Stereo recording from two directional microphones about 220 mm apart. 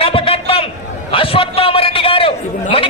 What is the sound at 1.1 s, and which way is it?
A man's voice, 25° left (ahead or behind).